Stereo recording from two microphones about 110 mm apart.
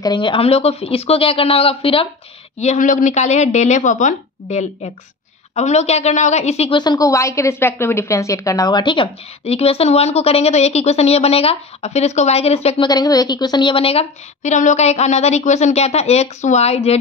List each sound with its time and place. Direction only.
0.0 s speech: 45° left (ahead or behind)
2.6 s a woman's voice: 90° left
6.7 s a woman's voice: 40° left (ahead or behind)
9.4 s a woman's voice: 65° left (ahead or behind)
12.8 s a woman's voice: 35° left (ahead or behind); by 17.0 s 70° left (ahead or behind)